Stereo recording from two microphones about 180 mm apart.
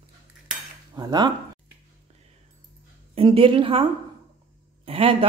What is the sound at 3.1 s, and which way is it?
A woman's voice, 30° right (ahead or behind).